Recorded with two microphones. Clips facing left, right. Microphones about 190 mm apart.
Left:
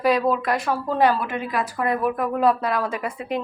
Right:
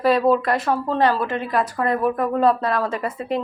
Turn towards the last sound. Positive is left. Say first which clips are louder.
# right 2 dB
turn(degrees=0)  # may be behind; listen again after turning